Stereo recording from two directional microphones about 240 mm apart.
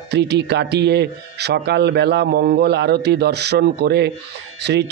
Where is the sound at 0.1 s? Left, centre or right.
Right.